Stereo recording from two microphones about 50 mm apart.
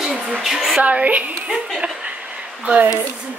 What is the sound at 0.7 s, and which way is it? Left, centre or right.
Speech, right.